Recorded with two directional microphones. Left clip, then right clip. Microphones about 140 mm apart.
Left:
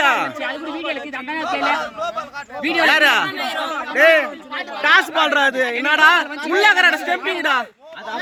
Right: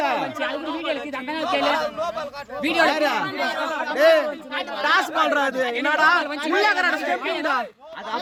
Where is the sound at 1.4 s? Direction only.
30° right (ahead or behind).